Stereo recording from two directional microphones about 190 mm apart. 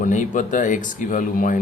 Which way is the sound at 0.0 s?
40° left (ahead or behind).